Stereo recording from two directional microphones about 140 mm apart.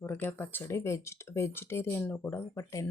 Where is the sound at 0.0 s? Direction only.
15° left (ahead or behind).